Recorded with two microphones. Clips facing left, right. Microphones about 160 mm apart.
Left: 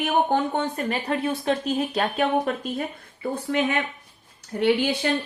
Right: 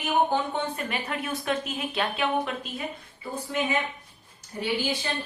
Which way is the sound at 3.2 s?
60° left (ahead or behind).